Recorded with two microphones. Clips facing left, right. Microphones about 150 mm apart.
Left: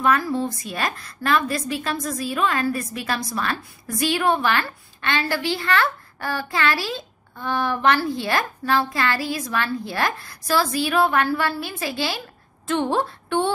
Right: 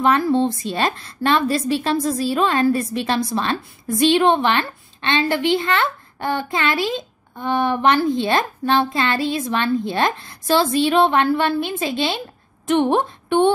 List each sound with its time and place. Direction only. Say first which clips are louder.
0.0 s a woman's voice: right 4 dB; 25° right (ahead or behind)